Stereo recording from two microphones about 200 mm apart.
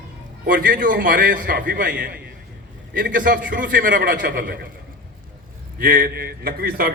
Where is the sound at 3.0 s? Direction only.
45° right (ahead or behind).